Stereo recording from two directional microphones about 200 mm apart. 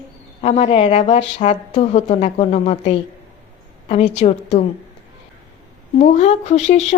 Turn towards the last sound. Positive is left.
turn(degrees=35)  # may be behind; listen again after turning